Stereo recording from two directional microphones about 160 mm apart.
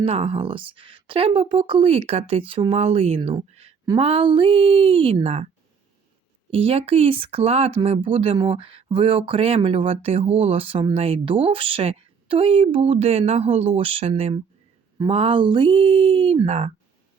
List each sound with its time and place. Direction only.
0.0 s speech: 40° right (ahead or behind)
3.5 s a sound: 40° right (ahead or behind)
3.8 s speech: 35° right (ahead or behind)
6.5 s speech: 35° right (ahead or behind)